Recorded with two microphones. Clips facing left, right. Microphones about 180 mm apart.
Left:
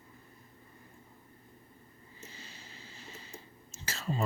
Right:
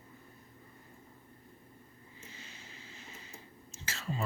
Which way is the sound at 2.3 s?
35° left (ahead or behind).